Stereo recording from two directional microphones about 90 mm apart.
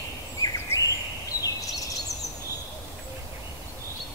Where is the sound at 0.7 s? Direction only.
30° left (ahead or behind).